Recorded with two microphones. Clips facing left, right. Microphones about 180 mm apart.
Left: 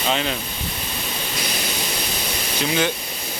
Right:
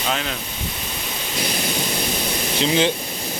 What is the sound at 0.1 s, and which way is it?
Speech, centre (ahead or behind).